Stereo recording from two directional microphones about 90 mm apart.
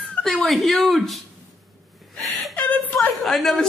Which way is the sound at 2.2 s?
Centre (ahead or behind).